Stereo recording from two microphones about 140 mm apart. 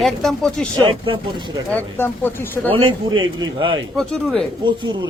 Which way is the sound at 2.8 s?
40° right (ahead or behind).